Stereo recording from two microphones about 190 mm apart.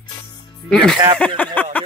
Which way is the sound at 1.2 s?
5° left (ahead or behind).